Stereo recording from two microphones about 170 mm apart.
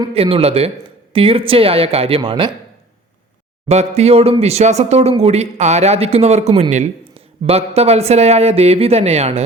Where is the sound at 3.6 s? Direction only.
40° right (ahead or behind).